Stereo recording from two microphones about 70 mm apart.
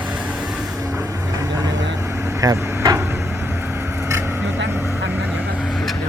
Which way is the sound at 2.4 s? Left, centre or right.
Right.